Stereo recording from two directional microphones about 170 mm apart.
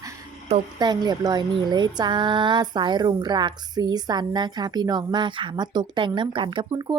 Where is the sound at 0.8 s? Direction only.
25° right (ahead or behind).